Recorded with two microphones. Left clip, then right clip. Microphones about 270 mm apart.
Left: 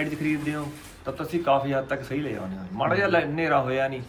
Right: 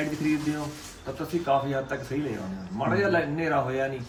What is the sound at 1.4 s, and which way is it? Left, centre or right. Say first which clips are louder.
A man's voice: left 3 dB; centre.